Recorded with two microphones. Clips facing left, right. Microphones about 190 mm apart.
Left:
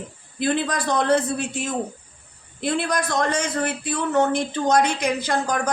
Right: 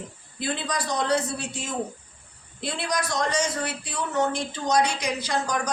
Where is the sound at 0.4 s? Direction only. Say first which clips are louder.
Left 6 dB; 55° left (ahead or behind).